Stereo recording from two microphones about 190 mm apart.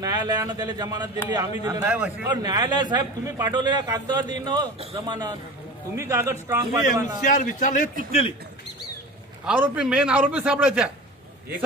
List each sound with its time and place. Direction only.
0.0 s a man's voice: 20° right (ahead or behind)
2.2 s a man's voice: 20° right (ahead or behind)
7.2 s a man's voice: 40° left (ahead or behind)
9.5 s a man's voice: 5° right (ahead or behind)